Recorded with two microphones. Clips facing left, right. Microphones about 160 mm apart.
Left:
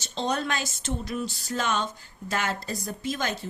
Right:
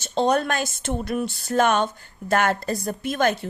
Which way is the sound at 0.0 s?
55° right (ahead or behind).